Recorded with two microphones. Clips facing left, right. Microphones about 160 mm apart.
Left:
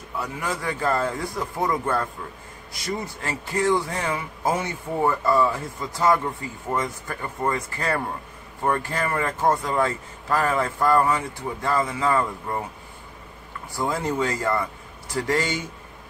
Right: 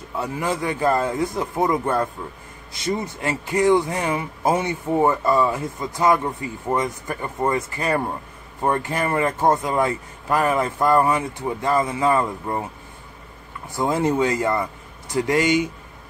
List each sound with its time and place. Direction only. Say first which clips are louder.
0.1 s speech: right 4 dB; 25° right (ahead or behind)
13.7 s speech: right 5 dB; 20° right (ahead or behind)